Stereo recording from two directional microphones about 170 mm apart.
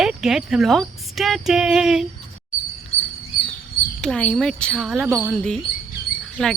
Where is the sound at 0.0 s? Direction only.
5° right (ahead or behind).